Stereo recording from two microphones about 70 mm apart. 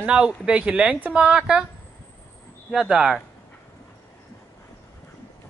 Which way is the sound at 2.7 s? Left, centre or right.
Centre.